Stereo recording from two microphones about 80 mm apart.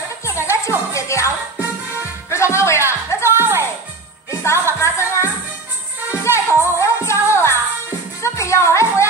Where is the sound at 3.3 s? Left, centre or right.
Right.